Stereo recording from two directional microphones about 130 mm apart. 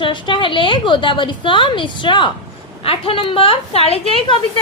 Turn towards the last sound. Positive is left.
turn(degrees=45)  # may be behind; listen again after turning